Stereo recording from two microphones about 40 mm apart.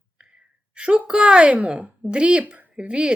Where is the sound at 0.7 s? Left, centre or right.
Right.